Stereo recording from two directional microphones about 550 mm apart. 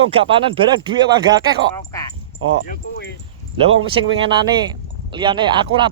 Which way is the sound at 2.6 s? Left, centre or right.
Centre.